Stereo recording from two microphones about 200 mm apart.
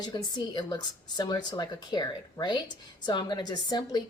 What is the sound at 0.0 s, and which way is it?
Speech, 20° left (ahead or behind).